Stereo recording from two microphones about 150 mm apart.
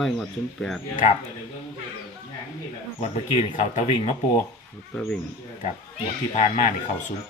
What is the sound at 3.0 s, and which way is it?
Speech, 50° left (ahead or behind).